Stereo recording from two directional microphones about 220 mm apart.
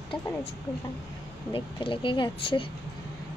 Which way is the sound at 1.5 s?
20° left (ahead or behind).